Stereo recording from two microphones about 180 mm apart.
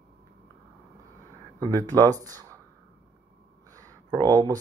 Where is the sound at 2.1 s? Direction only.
20° right (ahead or behind).